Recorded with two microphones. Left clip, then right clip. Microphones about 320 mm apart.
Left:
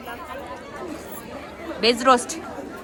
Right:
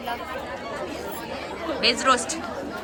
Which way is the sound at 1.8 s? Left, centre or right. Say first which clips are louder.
Left 3 dB; centre.